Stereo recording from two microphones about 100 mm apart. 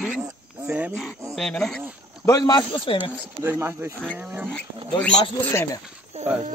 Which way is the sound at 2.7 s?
60° left (ahead or behind).